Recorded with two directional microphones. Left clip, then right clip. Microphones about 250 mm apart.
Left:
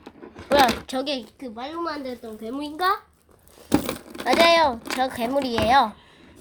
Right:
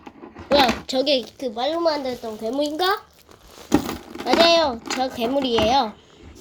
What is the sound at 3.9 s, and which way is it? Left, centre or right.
A child's voice, left.